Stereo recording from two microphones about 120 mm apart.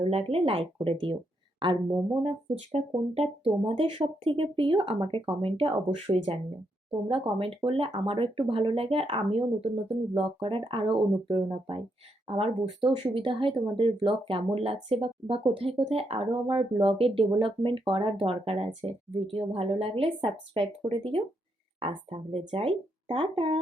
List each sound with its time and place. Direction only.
0.1 s speech: 55° right (ahead or behind)
0.8 s speech: 40° right (ahead or behind)
3.4 s speech: 40° right (ahead or behind)